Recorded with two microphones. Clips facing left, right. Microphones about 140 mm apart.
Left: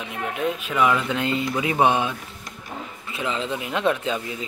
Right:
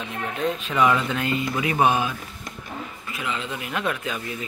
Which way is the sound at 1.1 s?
25° left (ahead or behind).